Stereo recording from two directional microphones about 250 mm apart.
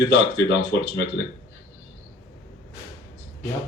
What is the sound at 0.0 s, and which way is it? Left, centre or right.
Speech, left.